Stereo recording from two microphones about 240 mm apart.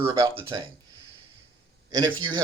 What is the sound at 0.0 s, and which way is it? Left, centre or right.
Speech, centre.